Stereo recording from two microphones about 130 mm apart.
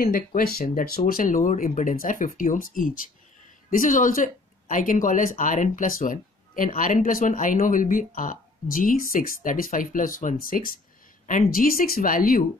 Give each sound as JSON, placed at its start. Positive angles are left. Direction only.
{"t": 0.0, "sound": "speech", "side_deg": 90}